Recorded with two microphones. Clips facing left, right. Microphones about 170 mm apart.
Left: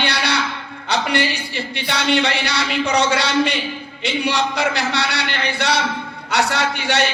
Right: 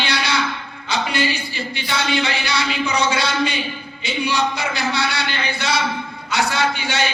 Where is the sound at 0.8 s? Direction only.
70° left (ahead or behind).